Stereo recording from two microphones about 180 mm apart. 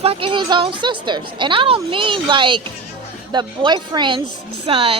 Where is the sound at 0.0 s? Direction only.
30° right (ahead or behind).